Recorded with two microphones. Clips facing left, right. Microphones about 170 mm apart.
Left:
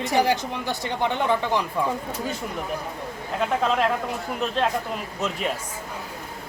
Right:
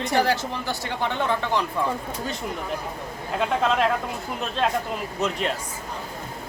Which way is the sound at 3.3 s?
Centre (ahead or behind).